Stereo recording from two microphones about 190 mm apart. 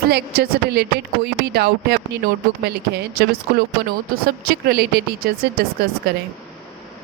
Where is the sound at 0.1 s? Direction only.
60° right (ahead or behind).